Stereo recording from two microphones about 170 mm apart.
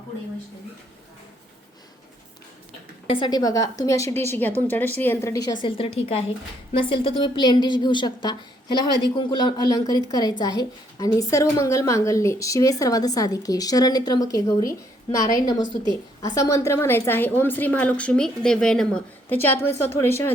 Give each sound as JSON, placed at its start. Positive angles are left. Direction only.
{"t": 3.1, "sound": "a woman's voice", "side_deg": 25}